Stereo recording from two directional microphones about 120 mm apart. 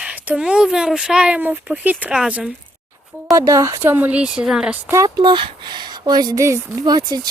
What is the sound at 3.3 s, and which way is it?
Speech, 30° right (ahead or behind).